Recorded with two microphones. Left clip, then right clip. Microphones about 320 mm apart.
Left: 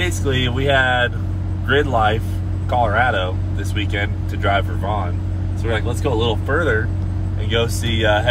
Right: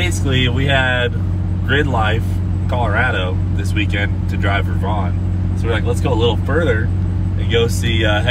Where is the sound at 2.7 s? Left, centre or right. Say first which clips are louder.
Left 1 dB; left.